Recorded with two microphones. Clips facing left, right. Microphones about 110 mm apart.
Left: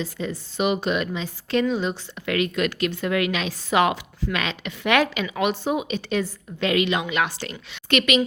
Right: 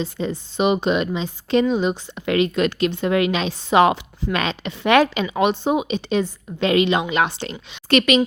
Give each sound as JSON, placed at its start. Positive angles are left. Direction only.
{"t": 0.0, "sound": "a woman's voice", "side_deg": -25}